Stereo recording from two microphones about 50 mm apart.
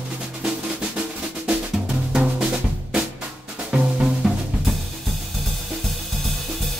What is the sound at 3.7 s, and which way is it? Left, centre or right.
Drum, right.